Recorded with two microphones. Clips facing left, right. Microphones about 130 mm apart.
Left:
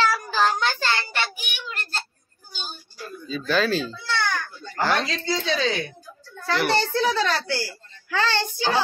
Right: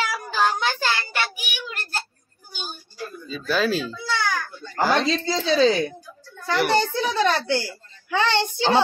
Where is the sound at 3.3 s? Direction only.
5° right (ahead or behind).